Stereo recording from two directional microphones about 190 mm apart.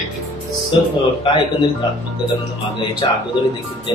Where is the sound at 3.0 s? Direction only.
25° left (ahead or behind).